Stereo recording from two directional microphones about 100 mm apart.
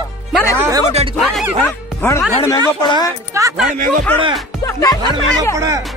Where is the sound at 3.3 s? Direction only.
30° right (ahead or behind).